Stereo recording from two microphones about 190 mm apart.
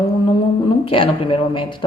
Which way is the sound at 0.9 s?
25° left (ahead or behind).